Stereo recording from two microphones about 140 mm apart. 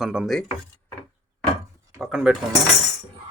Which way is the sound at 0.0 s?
5° right (ahead or behind).